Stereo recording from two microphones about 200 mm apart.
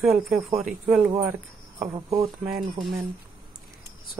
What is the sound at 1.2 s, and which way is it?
Speech, 15° right (ahead or behind).